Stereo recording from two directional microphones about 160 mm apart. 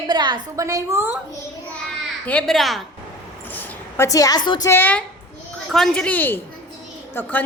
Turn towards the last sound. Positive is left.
turn(degrees=10)  # may be behind; listen again after turning